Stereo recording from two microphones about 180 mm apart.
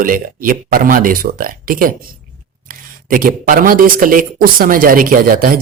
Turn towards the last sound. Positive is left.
turn(degrees=-50)  # may be behind; listen again after turning